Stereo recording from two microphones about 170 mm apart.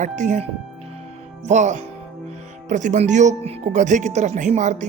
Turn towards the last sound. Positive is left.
turn(degrees=-45)  # may be behind; listen again after turning